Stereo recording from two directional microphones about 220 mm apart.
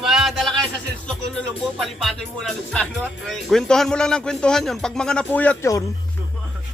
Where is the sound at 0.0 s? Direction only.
Centre (ahead or behind).